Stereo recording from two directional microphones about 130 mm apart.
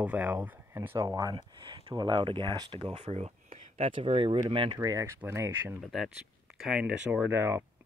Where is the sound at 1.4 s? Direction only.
40° right (ahead or behind).